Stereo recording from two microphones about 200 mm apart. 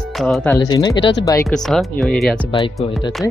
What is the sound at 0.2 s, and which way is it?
Speech, centre (ahead or behind).